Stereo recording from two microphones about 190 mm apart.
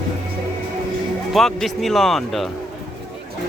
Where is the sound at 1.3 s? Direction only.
Centre (ahead or behind).